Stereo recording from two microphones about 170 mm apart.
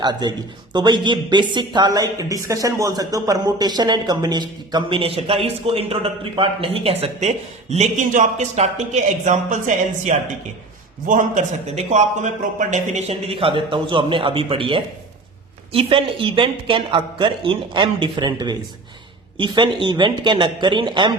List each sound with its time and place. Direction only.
0.0 s a woman's voice: 25° right (ahead or behind)